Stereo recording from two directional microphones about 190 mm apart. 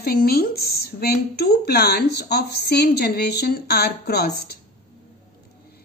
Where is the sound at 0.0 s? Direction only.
55° left (ahead or behind).